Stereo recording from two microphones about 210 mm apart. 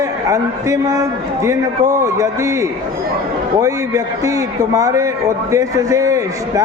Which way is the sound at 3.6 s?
15° right (ahead or behind).